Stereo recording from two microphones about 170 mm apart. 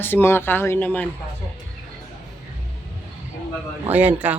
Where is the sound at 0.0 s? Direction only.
15° left (ahead or behind).